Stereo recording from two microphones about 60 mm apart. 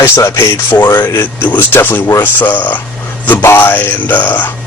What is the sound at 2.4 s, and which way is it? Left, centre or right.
Speech, left.